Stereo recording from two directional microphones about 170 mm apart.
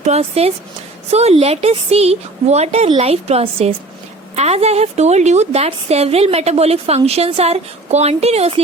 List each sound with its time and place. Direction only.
0.0 s a woman's voice: 40° right (ahead or behind)